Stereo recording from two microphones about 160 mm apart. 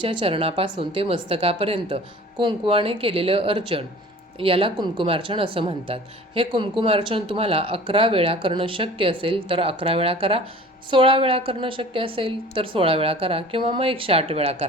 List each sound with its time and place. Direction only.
0.0 s speech: 30° right (ahead or behind)